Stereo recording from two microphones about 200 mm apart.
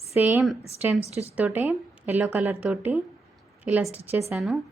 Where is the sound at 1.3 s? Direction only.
10° right (ahead or behind).